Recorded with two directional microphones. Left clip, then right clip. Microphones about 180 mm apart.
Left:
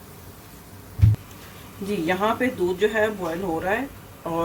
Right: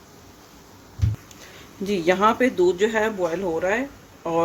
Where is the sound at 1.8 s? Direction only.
60° right (ahead or behind).